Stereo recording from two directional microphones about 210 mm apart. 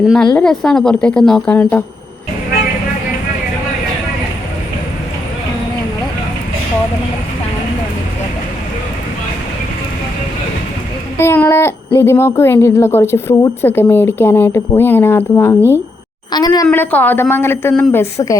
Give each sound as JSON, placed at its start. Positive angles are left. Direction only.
{"t": 0.0, "sound": "a woman's voice", "side_deg": 0}
{"t": 11.2, "sound": "a woman's voice", "side_deg": 10}
{"t": 16.6, "sound": "speech", "side_deg": 10}